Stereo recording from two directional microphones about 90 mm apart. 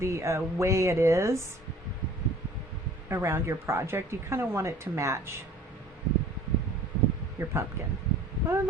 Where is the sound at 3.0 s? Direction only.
30° right (ahead or behind).